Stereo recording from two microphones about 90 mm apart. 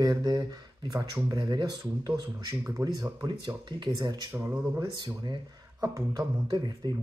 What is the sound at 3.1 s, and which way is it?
Speech, 55° right (ahead or behind).